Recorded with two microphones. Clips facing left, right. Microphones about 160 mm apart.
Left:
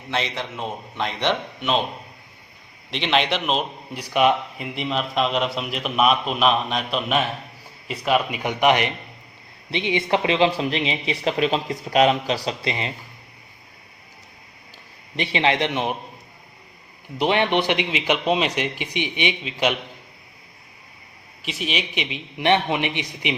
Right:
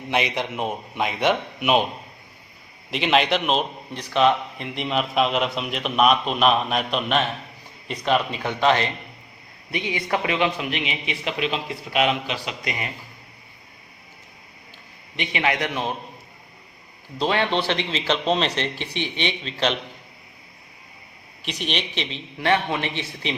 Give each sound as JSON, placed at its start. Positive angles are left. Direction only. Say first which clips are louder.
{"t": 0.1, "sound": "a man's voice", "louder": "right 3 dB", "side_deg": -15}
{"t": 2.9, "sound": "a man's voice", "louder": "right 2 dB", "side_deg": -5}
{"t": 4.0, "sound": "a man's voice", "louder": "even", "side_deg": 10}
{"t": 15.1, "sound": "a man's voice", "louder": "left 3 dB", "side_deg": 30}
{"t": 17.2, "sound": "a man's voice", "louder": "left 2 dB", "side_deg": 20}
{"t": 21.4, "sound": "a man's voice", "louder": "left 1 dB", "side_deg": 5}